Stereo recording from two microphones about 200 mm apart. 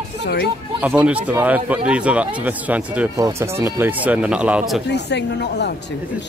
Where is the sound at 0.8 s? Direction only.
5° right (ahead or behind).